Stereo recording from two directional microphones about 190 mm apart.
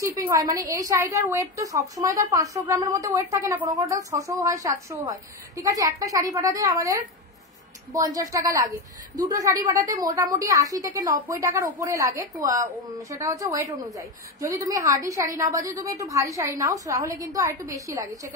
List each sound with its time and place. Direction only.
0.0 s a woman's voice: 15° right (ahead or behind)